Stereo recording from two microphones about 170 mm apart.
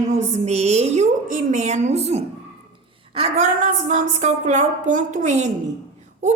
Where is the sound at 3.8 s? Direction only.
45° right (ahead or behind).